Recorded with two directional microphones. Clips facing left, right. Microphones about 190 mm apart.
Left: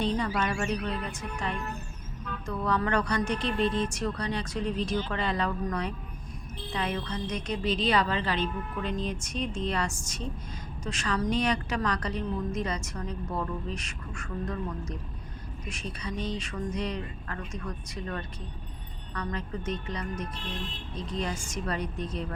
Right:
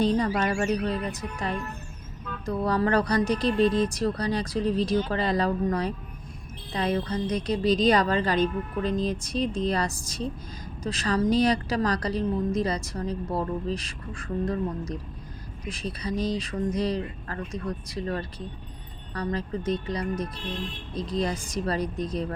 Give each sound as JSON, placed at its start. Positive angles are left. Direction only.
{"t": 0.0, "sound": "a woman's voice", "side_deg": -40}
{"t": 2.5, "sound": "a woman's voice", "side_deg": -35}